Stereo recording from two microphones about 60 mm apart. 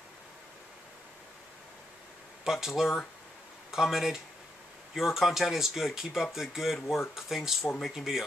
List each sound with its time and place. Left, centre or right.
2.4 s speech: centre